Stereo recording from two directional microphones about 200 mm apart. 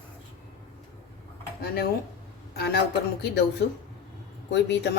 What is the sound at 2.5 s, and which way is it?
Speech, 55° left (ahead or behind).